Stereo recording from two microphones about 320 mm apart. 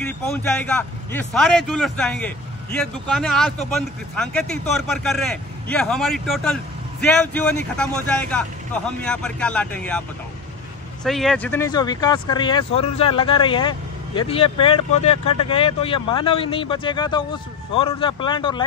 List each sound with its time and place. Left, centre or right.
0.0 s a man's voice: centre
11.1 s speech: centre